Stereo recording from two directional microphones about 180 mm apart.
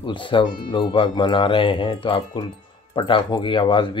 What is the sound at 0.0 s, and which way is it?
Speech, 25° left (ahead or behind).